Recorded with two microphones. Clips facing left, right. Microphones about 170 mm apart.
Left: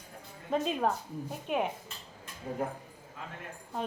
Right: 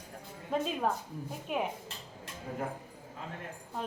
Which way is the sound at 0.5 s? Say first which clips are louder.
Left 2 dB; centre (ahead or behind).